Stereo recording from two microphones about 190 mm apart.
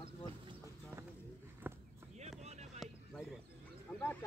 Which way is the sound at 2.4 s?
35° right (ahead or behind).